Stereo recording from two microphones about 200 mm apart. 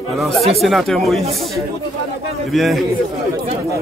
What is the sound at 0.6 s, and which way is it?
Speech, centre (ahead or behind).